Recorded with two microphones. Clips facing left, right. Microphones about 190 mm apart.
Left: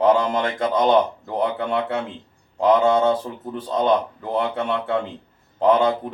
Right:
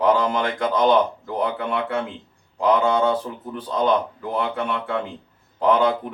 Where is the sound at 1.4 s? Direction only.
25° left (ahead or behind).